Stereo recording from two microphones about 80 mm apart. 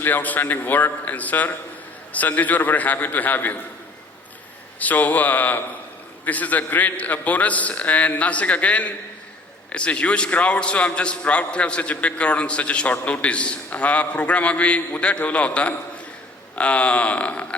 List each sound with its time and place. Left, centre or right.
0.0 s a man's voice: left
4.8 s a man's voice: centre